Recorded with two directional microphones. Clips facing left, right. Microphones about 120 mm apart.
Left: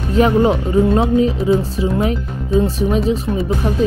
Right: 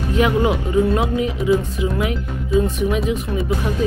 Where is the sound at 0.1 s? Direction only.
35° left (ahead or behind).